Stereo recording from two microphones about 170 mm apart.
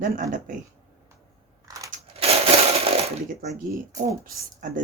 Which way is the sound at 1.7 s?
20° right (ahead or behind).